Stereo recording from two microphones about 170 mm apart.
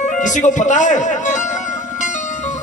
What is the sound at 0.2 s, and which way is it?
Speech, 45° left (ahead or behind).